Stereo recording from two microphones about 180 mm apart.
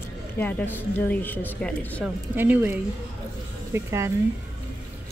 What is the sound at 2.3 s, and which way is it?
Speech, 10° right (ahead or behind).